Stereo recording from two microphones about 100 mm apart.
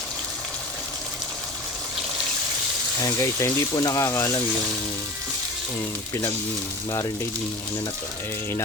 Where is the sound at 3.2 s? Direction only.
30° left (ahead or behind).